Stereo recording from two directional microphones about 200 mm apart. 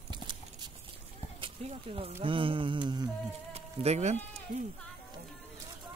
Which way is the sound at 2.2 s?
25° right (ahead or behind).